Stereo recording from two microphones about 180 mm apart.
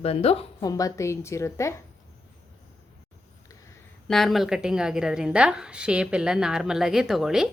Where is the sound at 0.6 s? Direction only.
20° left (ahead or behind).